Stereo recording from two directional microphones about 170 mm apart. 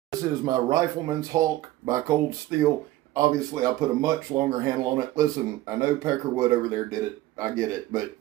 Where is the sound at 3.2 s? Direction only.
20° right (ahead or behind).